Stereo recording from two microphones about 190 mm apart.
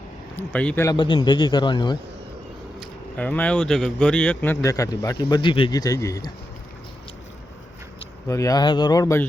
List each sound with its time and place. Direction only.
0.3 s a man's voice: 10° left (ahead or behind)
0.9 s a man's voice: 25° left (ahead or behind)
3.2 s a man's voice: 5° left (ahead or behind)
8.3 s a man's voice: 15° left (ahead or behind)